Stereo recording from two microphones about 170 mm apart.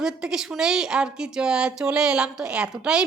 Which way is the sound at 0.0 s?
5° right (ahead or behind).